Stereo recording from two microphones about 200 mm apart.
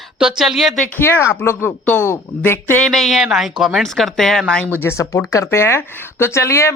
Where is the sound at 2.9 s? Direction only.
Centre (ahead or behind).